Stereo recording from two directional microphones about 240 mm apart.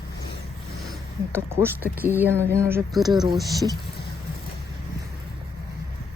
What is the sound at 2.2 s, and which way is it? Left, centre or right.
Speech, centre.